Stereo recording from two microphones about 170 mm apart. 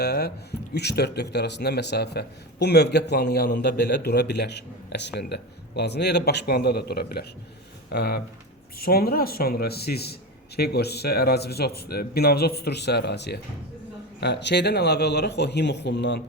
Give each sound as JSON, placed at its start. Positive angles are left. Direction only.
{"t": 0.0, "sound": "a man's voice", "side_deg": 70}